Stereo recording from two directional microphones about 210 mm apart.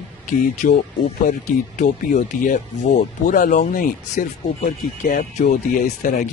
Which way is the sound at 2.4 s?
40° left (ahead or behind).